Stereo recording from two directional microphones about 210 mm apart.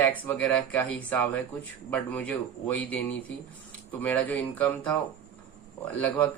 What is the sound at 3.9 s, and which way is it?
A man's voice, 10° left (ahead or behind).